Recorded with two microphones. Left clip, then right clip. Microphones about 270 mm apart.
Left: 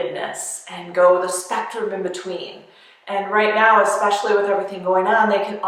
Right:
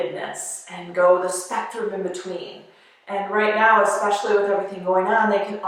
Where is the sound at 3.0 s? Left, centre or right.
Centre.